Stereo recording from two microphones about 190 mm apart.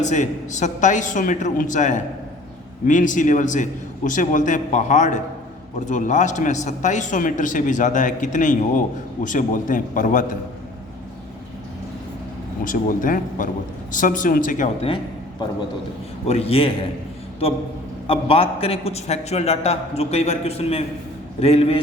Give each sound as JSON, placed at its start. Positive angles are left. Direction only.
{"t": 0.0, "sound": "a man's voice", "side_deg": 40}
{"t": 12.6, "sound": "a man's voice", "side_deg": 45}
{"t": 16.2, "sound": "a man's voice", "side_deg": 35}
{"t": 18.1, "sound": "a man's voice", "side_deg": 30}